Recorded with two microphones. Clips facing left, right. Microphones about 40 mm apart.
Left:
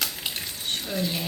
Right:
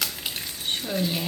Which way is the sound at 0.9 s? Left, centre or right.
Centre.